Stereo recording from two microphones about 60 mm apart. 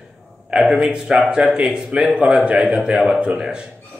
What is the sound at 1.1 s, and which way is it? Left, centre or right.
A man's voice, centre.